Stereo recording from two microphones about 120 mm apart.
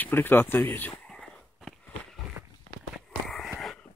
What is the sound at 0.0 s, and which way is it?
Speech, 15° left (ahead or behind).